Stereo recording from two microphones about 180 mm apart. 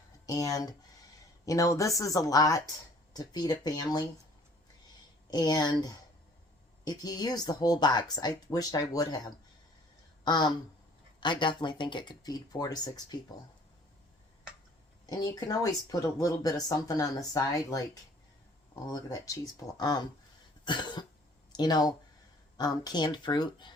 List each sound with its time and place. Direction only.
0.3 s speech: 20° left (ahead or behind)
5.3 s speech: 25° left (ahead or behind)
10.2 s speech: 25° left (ahead or behind)
15.0 s speech: 20° left (ahead or behind)
18.9 s speech: 20° left (ahead or behind)